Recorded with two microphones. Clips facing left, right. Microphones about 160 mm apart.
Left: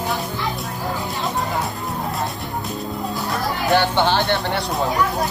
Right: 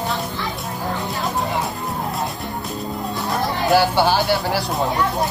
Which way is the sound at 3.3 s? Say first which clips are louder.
Right 2 dB; 5° right (ahead or behind).